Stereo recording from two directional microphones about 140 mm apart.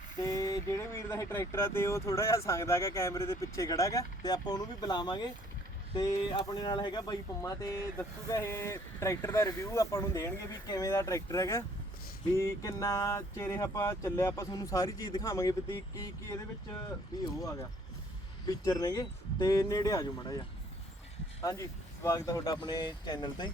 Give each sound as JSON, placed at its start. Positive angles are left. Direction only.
{"t": 0.2, "sound": "speech", "side_deg": 25}
{"t": 17.2, "sound": "speech", "side_deg": 25}
{"t": 21.4, "sound": "speech", "side_deg": 25}